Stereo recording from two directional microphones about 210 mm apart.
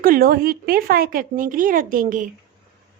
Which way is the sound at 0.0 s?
45° right (ahead or behind).